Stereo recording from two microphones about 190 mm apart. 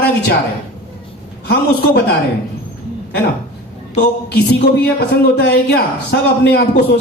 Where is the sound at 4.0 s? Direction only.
65° left (ahead or behind).